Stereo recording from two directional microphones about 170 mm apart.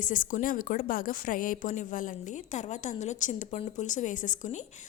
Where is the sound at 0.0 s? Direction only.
55° left (ahead or behind).